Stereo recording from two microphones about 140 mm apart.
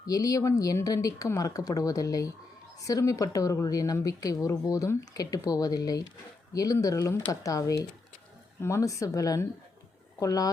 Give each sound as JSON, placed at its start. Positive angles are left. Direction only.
{"t": 0.0, "sound": "a woman's voice", "side_deg": 25}